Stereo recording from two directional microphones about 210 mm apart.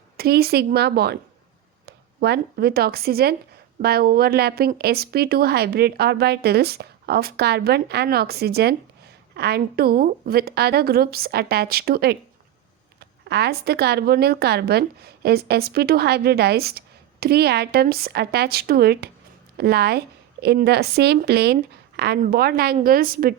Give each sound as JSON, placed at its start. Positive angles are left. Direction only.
{"t": 0.2, "sound": "speech", "side_deg": -50}